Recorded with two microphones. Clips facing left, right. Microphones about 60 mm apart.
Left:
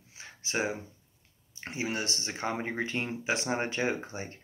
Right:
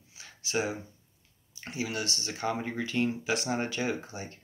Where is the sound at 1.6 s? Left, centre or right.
Left.